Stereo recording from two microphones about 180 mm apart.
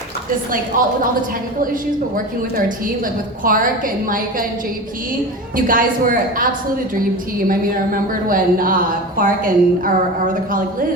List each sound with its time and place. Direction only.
0.7 s a woman's voice: 50° right (ahead or behind)
5.5 s a woman's voice: 50° right (ahead or behind)
7.9 s a woman's voice: 50° right (ahead or behind)